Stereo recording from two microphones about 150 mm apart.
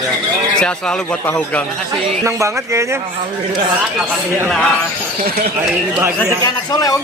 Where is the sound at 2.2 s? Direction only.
20° right (ahead or behind).